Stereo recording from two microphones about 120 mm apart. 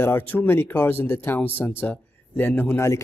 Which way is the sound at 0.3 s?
15° left (ahead or behind).